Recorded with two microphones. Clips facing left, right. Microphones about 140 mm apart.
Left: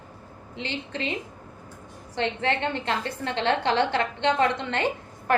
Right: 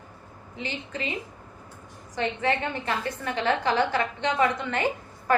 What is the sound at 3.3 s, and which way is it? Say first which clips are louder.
A woman's voice: left 1 dB; 30° left (ahead or behind).